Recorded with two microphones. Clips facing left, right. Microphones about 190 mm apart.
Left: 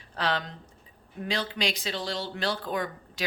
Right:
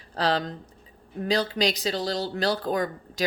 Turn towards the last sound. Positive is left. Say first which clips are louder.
# right 4 dB
turn(degrees=-40)  # may be behind; listen again after turning